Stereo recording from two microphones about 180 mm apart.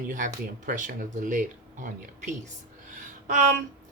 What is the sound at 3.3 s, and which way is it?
Speech, 45° right (ahead or behind).